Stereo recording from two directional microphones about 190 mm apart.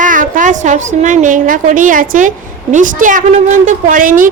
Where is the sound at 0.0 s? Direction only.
45° right (ahead or behind).